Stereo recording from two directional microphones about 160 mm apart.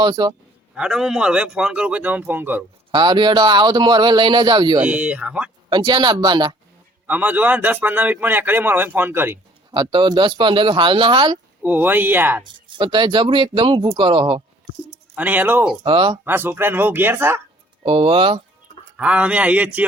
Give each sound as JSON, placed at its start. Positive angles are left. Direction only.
{"t": 0.0, "sound": "speech", "side_deg": -30}
{"t": 0.8, "sound": "a man's voice", "side_deg": -5}
{"t": 2.9, "sound": "speech", "side_deg": -30}
{"t": 4.8, "sound": "a man's voice", "side_deg": -10}
{"t": 5.6, "sound": "speech", "side_deg": -30}
{"t": 7.1, "sound": "a man's voice", "side_deg": -10}
{"t": 9.7, "sound": "speech", "side_deg": -30}
{"t": 11.6, "sound": "a man's voice", "side_deg": -10}
{"t": 12.4, "sound": "speech", "side_deg": -30}
{"t": 15.1, "sound": "a man's voice", "side_deg": -10}
{"t": 15.8, "sound": "speech", "side_deg": -30}
{"t": 16.2, "sound": "a man's voice", "side_deg": -15}
{"t": 17.8, "sound": "speech", "side_deg": -35}
{"t": 18.9, "sound": "a man's voice", "side_deg": -5}